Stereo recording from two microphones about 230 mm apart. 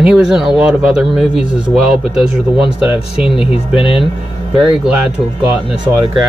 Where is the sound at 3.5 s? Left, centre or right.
Left.